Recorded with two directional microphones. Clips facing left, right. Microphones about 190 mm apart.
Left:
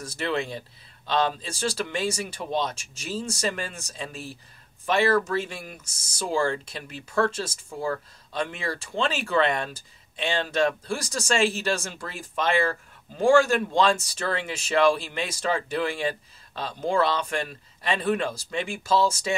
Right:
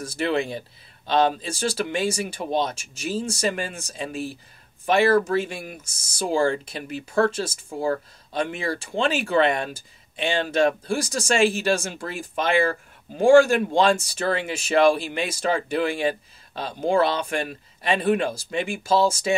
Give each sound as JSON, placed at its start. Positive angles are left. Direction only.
{"t": 0.2, "sound": "speech", "side_deg": -10}
{"t": 7.7, "sound": "speech", "side_deg": -30}
{"t": 8.3, "sound": "speech", "side_deg": -15}